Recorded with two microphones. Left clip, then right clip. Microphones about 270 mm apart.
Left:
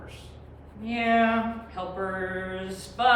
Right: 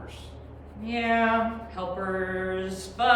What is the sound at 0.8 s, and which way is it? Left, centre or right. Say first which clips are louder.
Speech: left 1 dB; centre.